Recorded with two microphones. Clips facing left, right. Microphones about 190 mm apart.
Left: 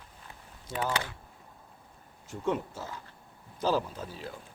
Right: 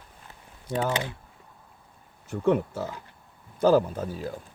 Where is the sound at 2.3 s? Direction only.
60° right (ahead or behind).